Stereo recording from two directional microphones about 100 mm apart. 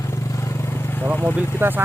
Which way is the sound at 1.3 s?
20° right (ahead or behind).